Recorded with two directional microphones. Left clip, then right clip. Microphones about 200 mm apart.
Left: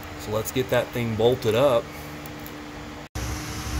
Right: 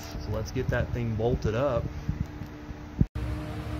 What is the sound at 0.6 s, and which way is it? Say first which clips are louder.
Speech: left 7 dB; 20° left (ahead or behind).